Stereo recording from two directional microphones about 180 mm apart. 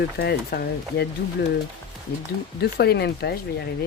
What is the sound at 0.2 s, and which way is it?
Speech, 60° left (ahead or behind).